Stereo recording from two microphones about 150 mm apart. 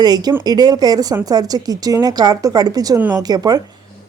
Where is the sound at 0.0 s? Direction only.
25° right (ahead or behind).